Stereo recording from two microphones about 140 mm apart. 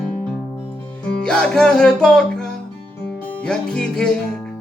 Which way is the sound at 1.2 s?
5° left (ahead or behind).